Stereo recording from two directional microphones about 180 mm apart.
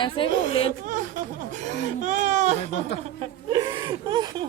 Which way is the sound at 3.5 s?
25° right (ahead or behind).